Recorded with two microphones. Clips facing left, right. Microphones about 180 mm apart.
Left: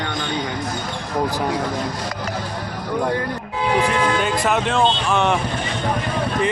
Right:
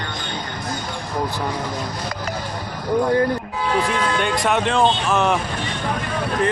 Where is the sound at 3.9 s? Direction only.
Centre (ahead or behind).